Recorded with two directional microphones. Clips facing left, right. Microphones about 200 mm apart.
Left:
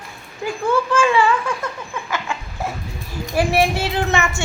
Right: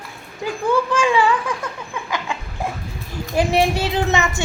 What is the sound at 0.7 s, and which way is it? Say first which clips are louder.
Speech: left 1 dB; 15° right (ahead or behind).